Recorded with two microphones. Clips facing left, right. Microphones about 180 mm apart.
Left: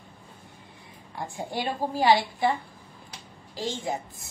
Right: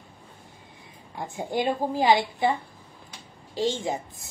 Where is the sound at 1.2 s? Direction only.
20° right (ahead or behind).